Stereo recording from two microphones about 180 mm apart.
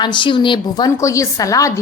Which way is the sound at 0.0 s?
25° left (ahead or behind).